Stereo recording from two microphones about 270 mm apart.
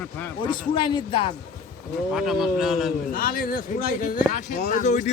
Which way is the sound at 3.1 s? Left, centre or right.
Left.